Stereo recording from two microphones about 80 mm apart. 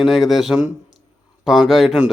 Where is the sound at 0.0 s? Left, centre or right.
Centre.